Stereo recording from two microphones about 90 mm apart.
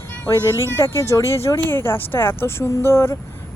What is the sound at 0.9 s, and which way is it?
Speech, 30° left (ahead or behind).